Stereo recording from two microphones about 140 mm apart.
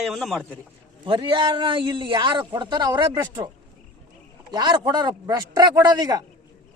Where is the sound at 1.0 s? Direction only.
35° right (ahead or behind).